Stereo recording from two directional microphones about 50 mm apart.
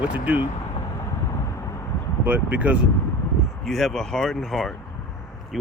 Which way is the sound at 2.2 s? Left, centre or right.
Right.